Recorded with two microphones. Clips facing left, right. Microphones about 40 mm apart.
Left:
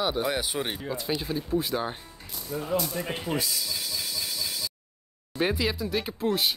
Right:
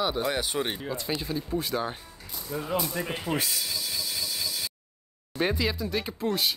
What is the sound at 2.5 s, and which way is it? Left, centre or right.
Speech, centre.